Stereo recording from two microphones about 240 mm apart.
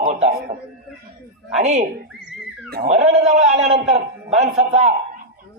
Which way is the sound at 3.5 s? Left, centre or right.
Right.